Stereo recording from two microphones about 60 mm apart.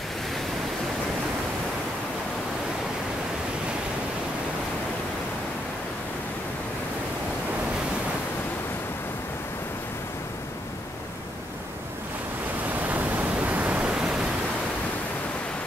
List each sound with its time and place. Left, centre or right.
12.7 s pink noise: right; by 14.2 s centre